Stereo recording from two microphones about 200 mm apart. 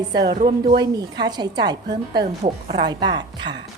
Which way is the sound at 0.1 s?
20° right (ahead or behind).